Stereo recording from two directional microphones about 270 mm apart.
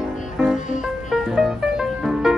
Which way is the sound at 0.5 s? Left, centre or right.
Left.